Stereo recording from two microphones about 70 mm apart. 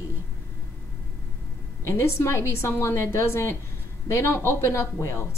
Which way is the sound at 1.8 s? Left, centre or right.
Left.